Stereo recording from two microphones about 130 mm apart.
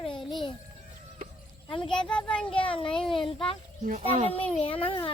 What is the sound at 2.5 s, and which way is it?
Child singing, 45° left (ahead or behind).